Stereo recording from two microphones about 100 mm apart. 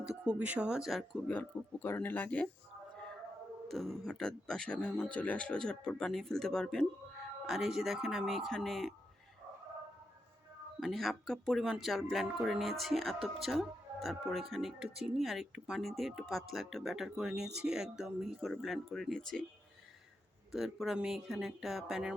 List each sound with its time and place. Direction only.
0.0 s speech: 10° right (ahead or behind)
1.3 s speech: 20° left (ahead or behind)
3.7 s speech: 5° left (ahead or behind)
10.8 s speech: centre (ahead or behind)
20.5 s speech: centre (ahead or behind)